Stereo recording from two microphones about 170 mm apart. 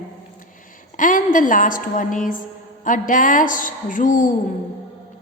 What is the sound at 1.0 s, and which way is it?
A woman's voice, 50° left (ahead or behind).